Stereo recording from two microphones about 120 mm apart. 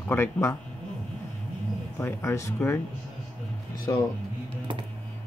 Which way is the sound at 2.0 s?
20° left (ahead or behind).